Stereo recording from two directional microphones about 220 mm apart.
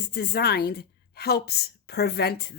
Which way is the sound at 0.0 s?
45° left (ahead or behind).